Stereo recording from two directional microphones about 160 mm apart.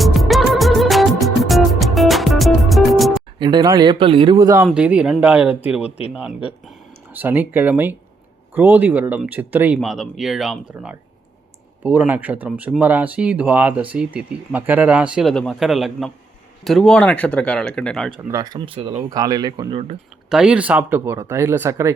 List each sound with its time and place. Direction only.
0.0 s music: centre (ahead or behind)
3.3 s speech: 25° right (ahead or behind)
4.6 s speech: 5° right (ahead or behind)
7.1 s speech: 10° right (ahead or behind); by 18.1 s 5° left (ahead or behind)
18.3 s speech: 20° right (ahead or behind)
18.9 s speech: 25° right (ahead or behind)
20.3 s speech: 5° right (ahead or behind)